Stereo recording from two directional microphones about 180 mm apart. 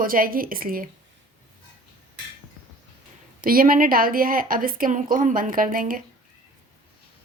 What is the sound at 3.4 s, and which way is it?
A woman's voice, 50° right (ahead or behind).